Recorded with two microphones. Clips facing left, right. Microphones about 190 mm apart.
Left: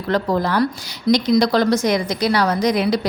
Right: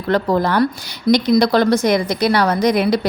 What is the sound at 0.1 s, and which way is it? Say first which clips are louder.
A woman's voice: right 3 dB; 60° right (ahead or behind).